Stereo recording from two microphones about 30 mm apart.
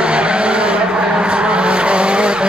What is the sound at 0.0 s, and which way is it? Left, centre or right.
Vehicle, right.